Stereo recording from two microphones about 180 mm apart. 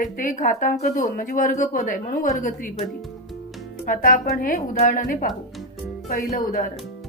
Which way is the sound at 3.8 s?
50° left (ahead or behind).